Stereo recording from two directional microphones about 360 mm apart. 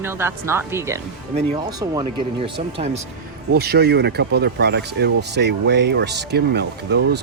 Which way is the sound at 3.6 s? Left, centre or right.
Right.